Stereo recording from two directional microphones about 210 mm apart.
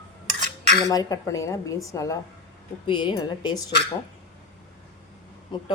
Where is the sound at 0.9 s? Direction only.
15° left (ahead or behind).